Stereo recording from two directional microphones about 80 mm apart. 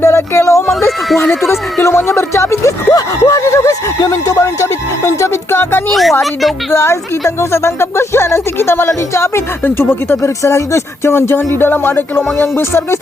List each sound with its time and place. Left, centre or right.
0.0 s music: left
1.5 s speech: left
2.9 s snicker: left
4.0 s music: left
5.9 s a sound: centre
6.7 s speech: left